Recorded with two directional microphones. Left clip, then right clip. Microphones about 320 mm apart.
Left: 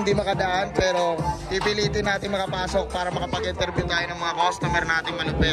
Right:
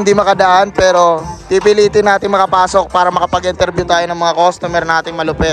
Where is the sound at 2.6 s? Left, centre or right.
Right.